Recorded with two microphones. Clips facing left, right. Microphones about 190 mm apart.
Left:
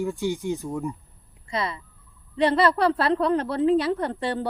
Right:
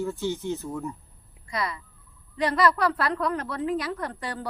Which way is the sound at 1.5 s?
25° left (ahead or behind).